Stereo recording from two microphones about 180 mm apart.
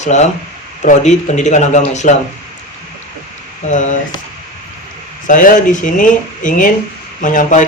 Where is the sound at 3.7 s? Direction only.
40° left (ahead or behind).